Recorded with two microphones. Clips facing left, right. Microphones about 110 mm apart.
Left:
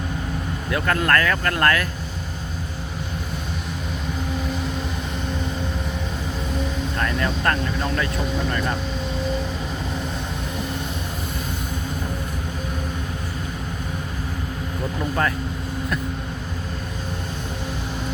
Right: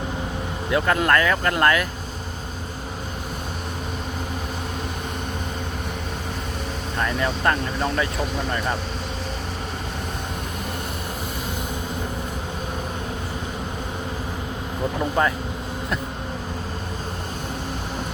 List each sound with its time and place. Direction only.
0.7 s speech: 20° right (ahead or behind)
7.0 s speech: 20° right (ahead or behind)